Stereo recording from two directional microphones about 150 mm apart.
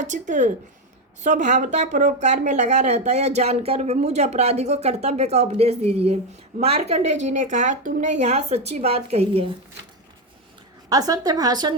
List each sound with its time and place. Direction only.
0.0 s speech: 55° right (ahead or behind)
10.8 s a woman's voice: 25° right (ahead or behind)